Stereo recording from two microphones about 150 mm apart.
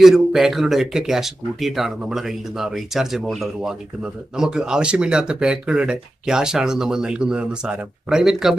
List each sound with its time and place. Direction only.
0.0 s speech: centre (ahead or behind)